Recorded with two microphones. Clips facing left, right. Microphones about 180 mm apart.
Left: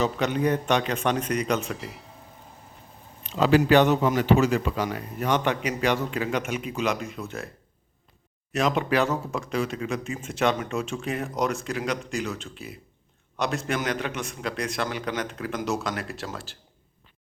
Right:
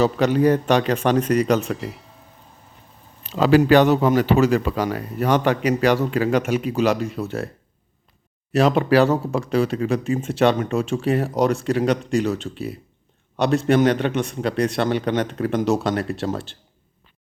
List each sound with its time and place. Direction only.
0.0 s speech: 40° right (ahead or behind)
1.8 s speech: centre (ahead or behind)
3.2 s speech: 40° right (ahead or behind)
8.5 s speech: 35° right (ahead or behind)